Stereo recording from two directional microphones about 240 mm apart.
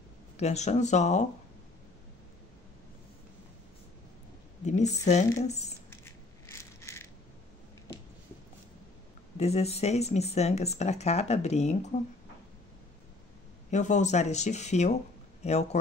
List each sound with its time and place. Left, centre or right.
0.4 s speech: left
4.6 s a woman's voice: left
5.9 s coin: centre
9.4 s speech: left
13.7 s speech: left